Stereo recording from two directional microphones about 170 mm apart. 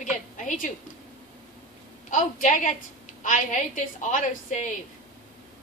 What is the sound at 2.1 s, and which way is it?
A woman's voice, 50° left (ahead or behind).